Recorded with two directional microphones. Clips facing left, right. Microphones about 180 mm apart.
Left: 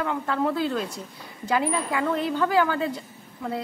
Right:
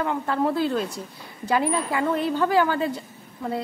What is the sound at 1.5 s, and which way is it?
A woman's voice, 30° right (ahead or behind).